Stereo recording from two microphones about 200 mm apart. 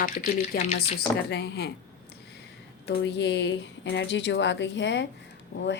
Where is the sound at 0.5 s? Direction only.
50° left (ahead or behind).